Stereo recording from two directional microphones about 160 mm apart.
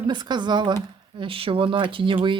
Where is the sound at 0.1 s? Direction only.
30° right (ahead or behind).